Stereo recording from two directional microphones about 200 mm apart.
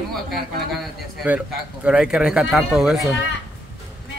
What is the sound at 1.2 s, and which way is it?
Speech, 5° right (ahead or behind).